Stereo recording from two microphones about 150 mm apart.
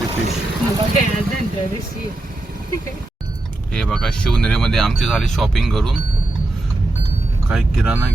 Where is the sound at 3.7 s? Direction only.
5° left (ahead or behind).